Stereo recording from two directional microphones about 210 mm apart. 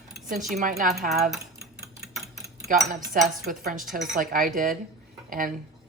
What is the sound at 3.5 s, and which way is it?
A woman's voice, 40° right (ahead or behind).